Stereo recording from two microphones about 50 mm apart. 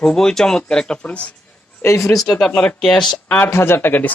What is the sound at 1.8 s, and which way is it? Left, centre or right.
Speech, left.